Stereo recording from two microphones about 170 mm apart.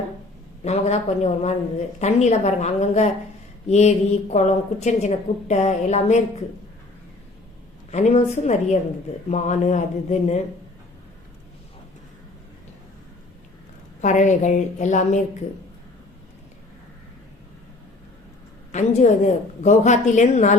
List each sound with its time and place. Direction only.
0.6 s a woman's voice: 40° left (ahead or behind)
7.9 s a woman's voice: 40° left (ahead or behind)
14.0 s a woman's voice: 45° left (ahead or behind)
18.7 s a woman's voice: 45° left (ahead or behind)